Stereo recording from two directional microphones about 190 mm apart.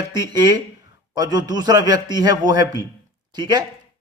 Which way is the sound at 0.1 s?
20° right (ahead or behind).